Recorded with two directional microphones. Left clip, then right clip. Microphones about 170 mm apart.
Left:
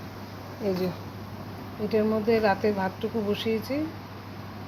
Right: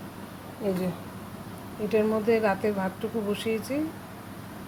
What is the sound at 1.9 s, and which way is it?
Speech, 10° right (ahead or behind).